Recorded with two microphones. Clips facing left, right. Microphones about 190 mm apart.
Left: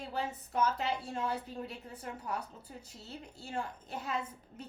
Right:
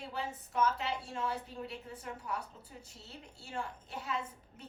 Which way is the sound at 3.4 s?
40° left (ahead or behind).